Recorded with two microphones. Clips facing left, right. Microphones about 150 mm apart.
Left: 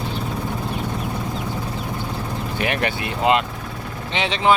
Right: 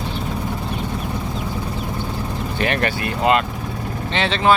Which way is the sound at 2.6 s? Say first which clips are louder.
Right 2 dB; 10° left (ahead or behind).